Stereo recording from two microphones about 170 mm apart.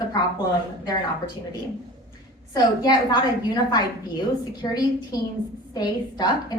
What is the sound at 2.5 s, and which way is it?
A woman's voice, 25° left (ahead or behind).